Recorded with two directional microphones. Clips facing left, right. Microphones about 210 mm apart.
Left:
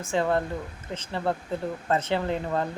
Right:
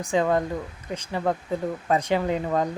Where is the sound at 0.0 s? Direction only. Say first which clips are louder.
Right 3 dB; 15° right (ahead or behind).